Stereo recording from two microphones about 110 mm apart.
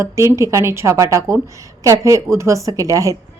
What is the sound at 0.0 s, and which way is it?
Speech, 25° right (ahead or behind).